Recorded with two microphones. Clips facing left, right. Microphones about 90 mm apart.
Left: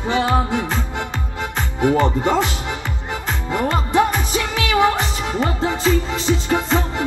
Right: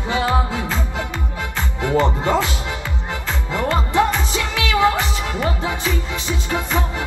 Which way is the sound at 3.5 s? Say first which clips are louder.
Left 1 dB; 20° left (ahead or behind).